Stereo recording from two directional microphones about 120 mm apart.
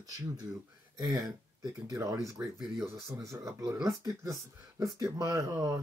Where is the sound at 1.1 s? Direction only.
5° right (ahead or behind).